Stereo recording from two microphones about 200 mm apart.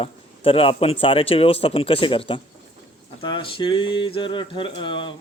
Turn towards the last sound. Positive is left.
turn(degrees=25)  # may be behind; listen again after turning